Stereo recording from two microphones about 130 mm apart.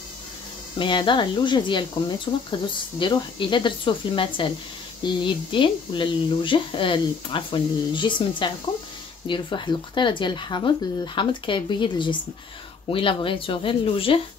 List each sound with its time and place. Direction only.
0.7 s speech: 40° left (ahead or behind)